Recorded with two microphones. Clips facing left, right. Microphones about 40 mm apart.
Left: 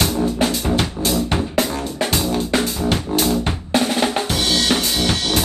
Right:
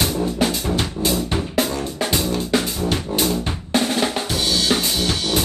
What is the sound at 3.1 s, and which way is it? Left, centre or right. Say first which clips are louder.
Music: left 1 dB; centre.